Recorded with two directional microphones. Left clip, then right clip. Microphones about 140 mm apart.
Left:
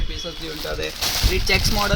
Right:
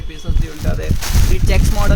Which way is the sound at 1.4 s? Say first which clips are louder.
Left 1 dB; 15° right (ahead or behind).